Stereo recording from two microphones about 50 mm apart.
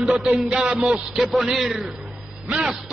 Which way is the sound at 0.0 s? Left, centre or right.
Centre.